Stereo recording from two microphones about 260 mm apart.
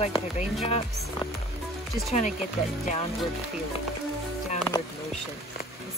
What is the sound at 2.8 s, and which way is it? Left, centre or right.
Speech, left.